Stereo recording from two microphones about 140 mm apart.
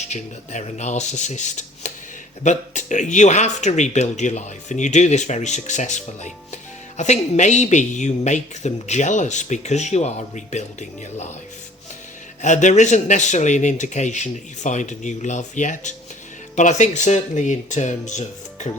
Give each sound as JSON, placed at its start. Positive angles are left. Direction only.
{"t": 0.1, "sound": "a woman's voice", "side_deg": 55}
{"t": 12.4, "sound": "a woman's voice", "side_deg": 60}